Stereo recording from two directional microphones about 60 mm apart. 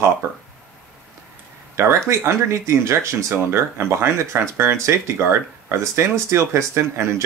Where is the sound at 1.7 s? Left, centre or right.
Right.